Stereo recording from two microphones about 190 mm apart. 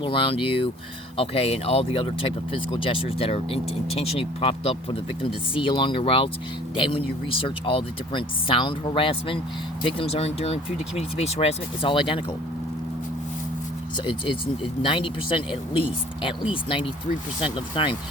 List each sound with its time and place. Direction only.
0.0 s speech: 25° left (ahead or behind)
14.0 s speech: 25° left (ahead or behind)